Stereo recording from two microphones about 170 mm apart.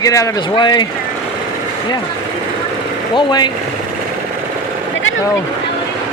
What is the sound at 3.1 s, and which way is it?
Speech, 25° left (ahead or behind).